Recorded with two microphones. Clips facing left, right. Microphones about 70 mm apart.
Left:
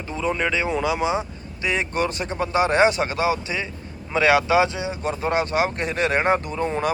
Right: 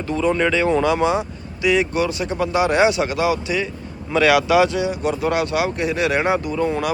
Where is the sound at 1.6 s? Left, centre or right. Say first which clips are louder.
Right 5 dB; left.